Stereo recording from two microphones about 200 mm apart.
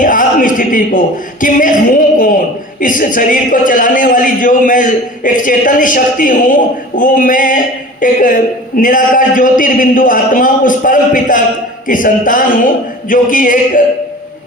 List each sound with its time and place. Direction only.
0.0 s a man's voice: 45° left (ahead or behind)